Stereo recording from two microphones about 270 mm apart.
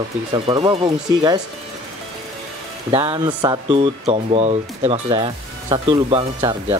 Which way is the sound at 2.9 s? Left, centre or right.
Centre.